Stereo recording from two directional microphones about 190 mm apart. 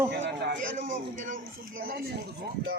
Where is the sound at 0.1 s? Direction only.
65° right (ahead or behind).